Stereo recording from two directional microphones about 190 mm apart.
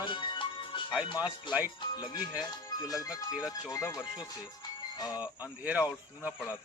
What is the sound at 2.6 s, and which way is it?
Music, 20° left (ahead or behind).